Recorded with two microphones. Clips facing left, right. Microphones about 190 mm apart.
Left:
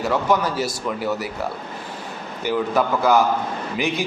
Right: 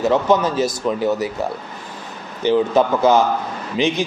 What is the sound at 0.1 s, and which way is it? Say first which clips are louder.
A man's voice: right 1 dB; 20° right (ahead or behind).